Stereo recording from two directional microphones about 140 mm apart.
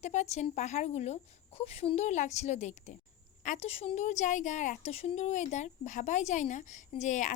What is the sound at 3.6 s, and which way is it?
A child's voice, 45° left (ahead or behind).